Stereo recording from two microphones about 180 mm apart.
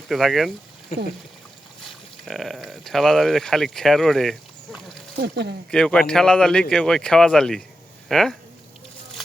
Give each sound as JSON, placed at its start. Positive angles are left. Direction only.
{"t": 0.1, "sound": "speech", "side_deg": 0}
{"t": 2.2, "sound": "speech", "side_deg": 0}
{"t": 5.1, "sound": "speech", "side_deg": -65}
{"t": 5.7, "sound": "speech", "side_deg": 5}